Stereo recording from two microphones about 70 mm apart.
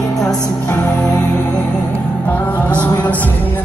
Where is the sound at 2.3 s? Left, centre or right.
Left.